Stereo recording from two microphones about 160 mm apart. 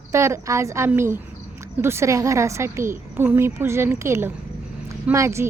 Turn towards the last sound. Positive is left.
turn(degrees=-15)  # may be behind; listen again after turning